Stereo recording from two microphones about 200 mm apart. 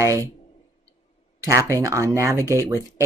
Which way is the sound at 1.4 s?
15° right (ahead or behind).